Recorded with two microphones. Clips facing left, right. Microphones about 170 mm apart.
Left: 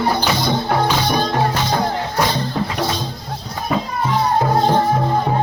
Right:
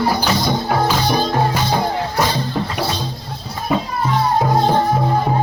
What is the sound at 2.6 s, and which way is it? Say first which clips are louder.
Music: even; centre (ahead or behind).